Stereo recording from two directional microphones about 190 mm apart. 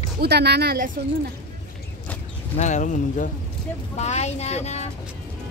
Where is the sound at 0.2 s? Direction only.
60° right (ahead or behind).